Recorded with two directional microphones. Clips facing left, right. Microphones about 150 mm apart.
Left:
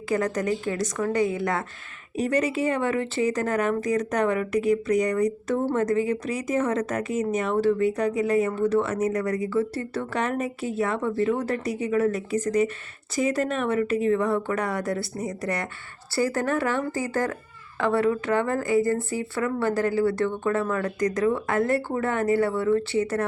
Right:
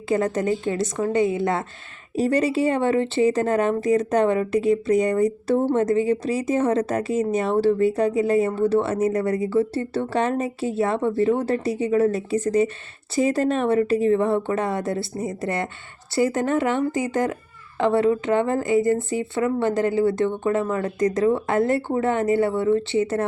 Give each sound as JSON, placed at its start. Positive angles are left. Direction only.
{"t": 0.1, "sound": "speech", "side_deg": -25}